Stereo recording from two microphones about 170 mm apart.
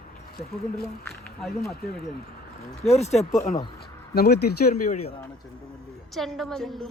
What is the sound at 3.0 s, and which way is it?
Speech, 40° left (ahead or behind).